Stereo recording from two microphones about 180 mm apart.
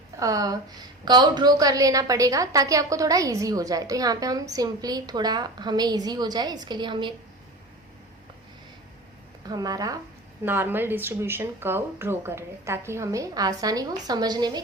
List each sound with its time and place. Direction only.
0.2 s a woman's voice: 20° right (ahead or behind)
9.5 s a woman's voice: 20° right (ahead or behind)